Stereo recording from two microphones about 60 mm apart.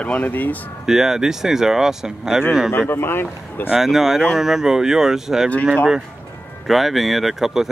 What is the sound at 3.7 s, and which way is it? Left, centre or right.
Speech, centre.